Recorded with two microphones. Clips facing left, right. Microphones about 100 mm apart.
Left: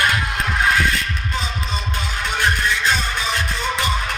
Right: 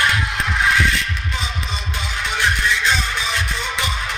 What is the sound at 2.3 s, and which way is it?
Music, 45° left (ahead or behind).